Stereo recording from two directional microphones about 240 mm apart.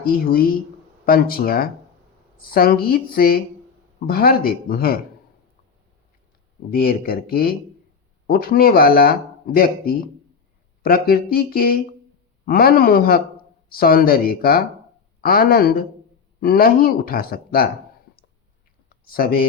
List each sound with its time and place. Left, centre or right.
0.0 s speech: left
6.7 s speech: left
10.8 s speech: left
19.0 s speech: left